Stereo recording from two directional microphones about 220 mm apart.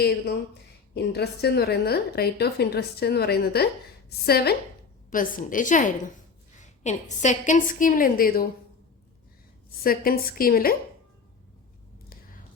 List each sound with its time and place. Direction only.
0.9 s a woman's voice: 50° left (ahead or behind)
9.8 s a woman's voice: 40° left (ahead or behind)